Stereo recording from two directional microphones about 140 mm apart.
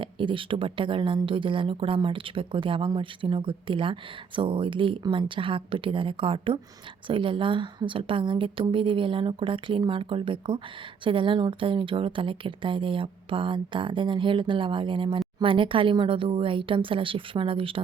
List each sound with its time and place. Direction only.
0.0 s a woman's voice: 35° right (ahead or behind)